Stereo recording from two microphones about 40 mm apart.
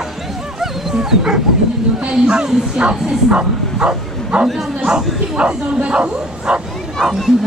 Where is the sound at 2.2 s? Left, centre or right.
Right.